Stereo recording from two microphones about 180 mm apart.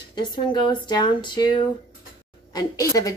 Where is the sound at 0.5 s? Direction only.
25° left (ahead or behind).